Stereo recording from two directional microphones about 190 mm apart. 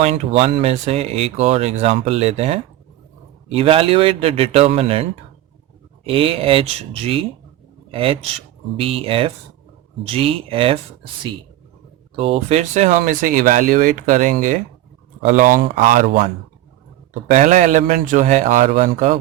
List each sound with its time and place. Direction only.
0.0 s speech: 30° right (ahead or behind)
6.1 s a man's voice: 30° right (ahead or behind); by 19.2 s 45° right (ahead or behind)